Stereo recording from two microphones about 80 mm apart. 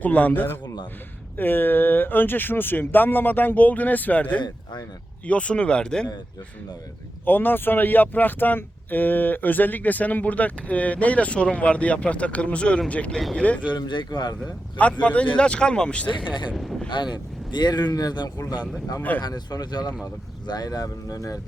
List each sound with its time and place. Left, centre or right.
0.0 s speech: centre
4.4 s speech: left
5.2 s speech: centre
7.3 s speech: left
13.1 s speech: centre
13.7 s speech: left
15.0 s speech: centre
16.6 s speech: centre
17.5 s speech: left